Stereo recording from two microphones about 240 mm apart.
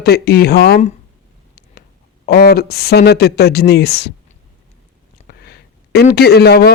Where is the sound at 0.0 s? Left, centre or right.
Left.